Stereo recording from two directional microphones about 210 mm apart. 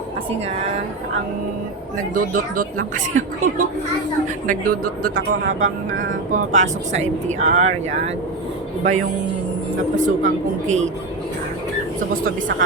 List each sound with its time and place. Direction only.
2.1 s speech: 40° right (ahead or behind)
5.6 s speech: 65° right (ahead or behind)
6.3 s speech: 35° right (ahead or behind)
12.1 s speech: 40° right (ahead or behind)